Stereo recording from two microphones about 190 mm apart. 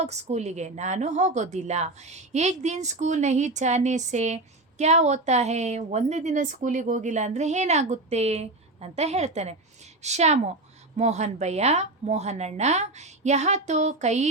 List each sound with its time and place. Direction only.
0.0 s a woman's voice: 35° right (ahead or behind)